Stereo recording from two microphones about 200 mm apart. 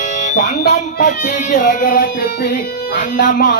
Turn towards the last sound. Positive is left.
turn(degrees=40)  # may be behind; listen again after turning